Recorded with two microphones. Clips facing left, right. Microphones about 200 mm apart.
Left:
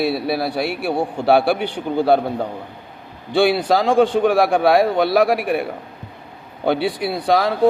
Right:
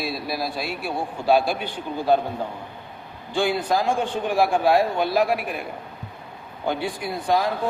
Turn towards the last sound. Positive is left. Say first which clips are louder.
# left 5 dB
turn(degrees=80)